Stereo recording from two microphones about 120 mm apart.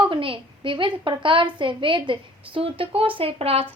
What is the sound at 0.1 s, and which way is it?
A child's voice, 45° right (ahead or behind).